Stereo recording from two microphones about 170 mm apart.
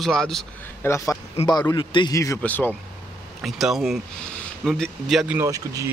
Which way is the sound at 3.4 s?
Centre (ahead or behind).